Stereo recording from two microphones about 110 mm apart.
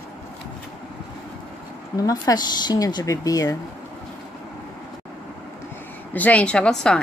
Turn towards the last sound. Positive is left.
turn(degrees=10)  # may be behind; listen again after turning